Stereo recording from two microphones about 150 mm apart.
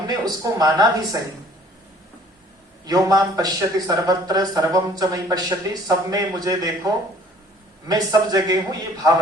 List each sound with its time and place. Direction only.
0.1 s speech: 25° right (ahead or behind)
2.8 s speech: 25° right (ahead or behind)